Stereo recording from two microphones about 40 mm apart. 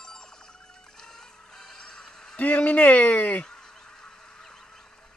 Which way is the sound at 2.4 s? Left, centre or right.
Left.